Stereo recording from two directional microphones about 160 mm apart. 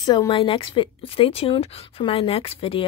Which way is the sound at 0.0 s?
25° left (ahead or behind).